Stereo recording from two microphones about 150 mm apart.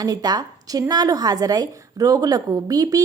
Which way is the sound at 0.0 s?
25° right (ahead or behind).